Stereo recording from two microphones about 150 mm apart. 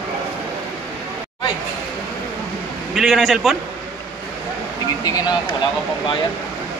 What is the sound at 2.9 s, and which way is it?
Speech, centre (ahead or behind).